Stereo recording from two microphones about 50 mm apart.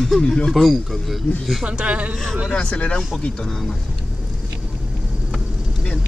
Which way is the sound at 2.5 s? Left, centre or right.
Centre.